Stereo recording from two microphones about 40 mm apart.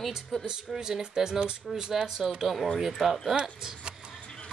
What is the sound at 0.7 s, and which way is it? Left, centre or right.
Speech, centre.